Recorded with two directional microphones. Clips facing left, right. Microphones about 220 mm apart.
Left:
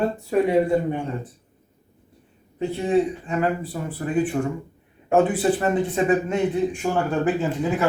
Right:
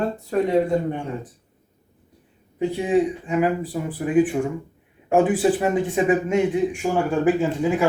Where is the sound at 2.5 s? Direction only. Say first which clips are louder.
Right 1 dB; 15° right (ahead or behind).